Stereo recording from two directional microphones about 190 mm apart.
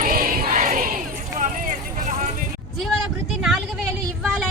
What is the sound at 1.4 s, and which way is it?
Vehicle, 40° right (ahead or behind).